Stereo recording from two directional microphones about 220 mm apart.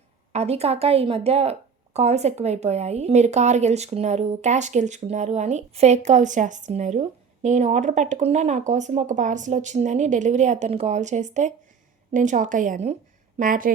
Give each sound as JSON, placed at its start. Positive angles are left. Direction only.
{"t": 0.3, "sound": "a woman's voice", "side_deg": -30}